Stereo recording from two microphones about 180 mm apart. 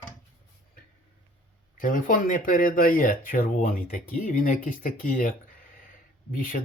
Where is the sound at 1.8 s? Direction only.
50° left (ahead or behind).